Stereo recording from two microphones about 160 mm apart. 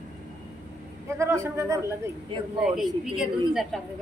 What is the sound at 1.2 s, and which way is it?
Speech, 20° right (ahead or behind).